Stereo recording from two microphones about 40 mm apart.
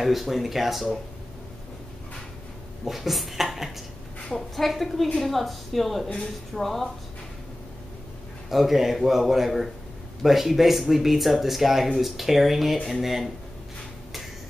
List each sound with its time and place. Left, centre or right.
0.0 s speech: centre
2.8 s a sound: centre
4.3 s speech: centre
8.5 s speech: centre